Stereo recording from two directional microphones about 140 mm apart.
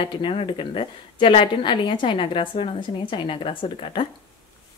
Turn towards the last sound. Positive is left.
turn(degrees=35)  # may be behind; listen again after turning